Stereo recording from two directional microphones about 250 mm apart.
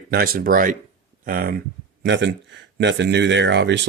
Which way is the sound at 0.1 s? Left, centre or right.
Right.